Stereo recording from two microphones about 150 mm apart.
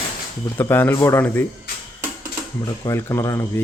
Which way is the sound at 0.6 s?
15° left (ahead or behind).